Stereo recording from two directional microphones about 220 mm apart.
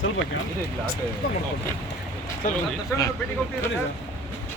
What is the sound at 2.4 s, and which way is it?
Speech, 35° left (ahead or behind).